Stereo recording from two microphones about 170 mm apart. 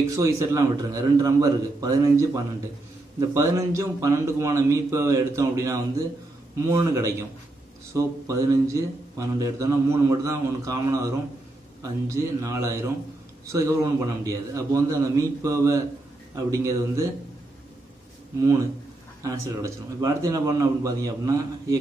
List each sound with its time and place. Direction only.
0.0 s a man's voice: 15° right (ahead or behind)
18.4 s a man's voice: 15° right (ahead or behind)